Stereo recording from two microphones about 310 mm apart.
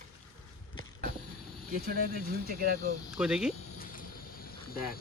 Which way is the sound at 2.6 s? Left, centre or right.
Right.